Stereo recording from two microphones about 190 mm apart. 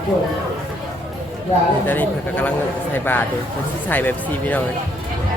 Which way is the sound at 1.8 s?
10° left (ahead or behind).